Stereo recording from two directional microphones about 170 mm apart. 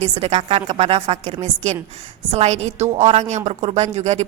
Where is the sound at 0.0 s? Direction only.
40° right (ahead or behind).